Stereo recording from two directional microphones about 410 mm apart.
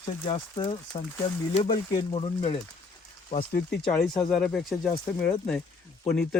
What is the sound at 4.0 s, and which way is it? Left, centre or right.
Speech, centre.